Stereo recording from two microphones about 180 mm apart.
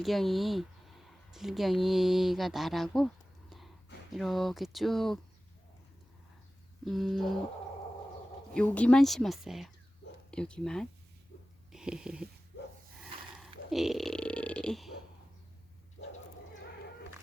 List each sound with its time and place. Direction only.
0.0 s speech: centre (ahead or behind)
4.1 s a woman's voice: centre (ahead or behind)
6.8 s a woman's voice: centre (ahead or behind)
8.5 s a woman's voice: 5° left (ahead or behind)
11.7 s a sound: 5° right (ahead or behind)
13.4 s burping: centre (ahead or behind)